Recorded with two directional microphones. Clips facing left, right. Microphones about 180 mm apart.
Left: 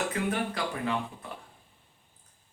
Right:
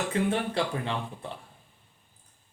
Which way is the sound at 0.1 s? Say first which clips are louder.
Right 3 dB; 30° right (ahead or behind).